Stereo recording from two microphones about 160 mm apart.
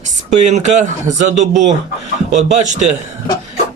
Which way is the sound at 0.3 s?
45° right (ahead or behind).